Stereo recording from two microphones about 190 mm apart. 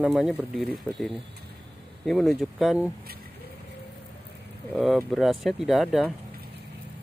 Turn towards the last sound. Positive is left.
turn(degrees=0)  # may be behind; listen again after turning